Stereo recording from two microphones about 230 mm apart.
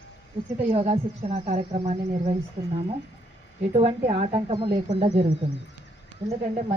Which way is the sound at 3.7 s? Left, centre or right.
Right.